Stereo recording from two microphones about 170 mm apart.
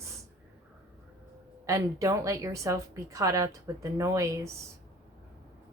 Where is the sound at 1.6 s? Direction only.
20° right (ahead or behind).